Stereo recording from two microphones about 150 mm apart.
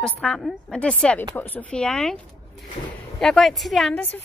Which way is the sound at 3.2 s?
Centre (ahead or behind).